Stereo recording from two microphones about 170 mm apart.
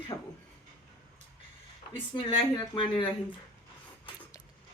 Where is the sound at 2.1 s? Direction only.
30° left (ahead or behind).